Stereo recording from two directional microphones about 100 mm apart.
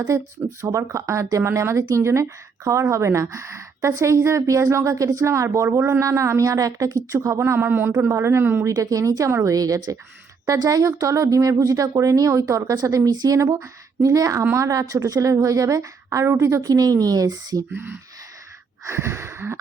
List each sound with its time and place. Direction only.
0.1 s a woman's voice: 35° right (ahead or behind)
8.7 s a woman's voice: 35° right (ahead or behind)
18.9 s speech: 25° right (ahead or behind)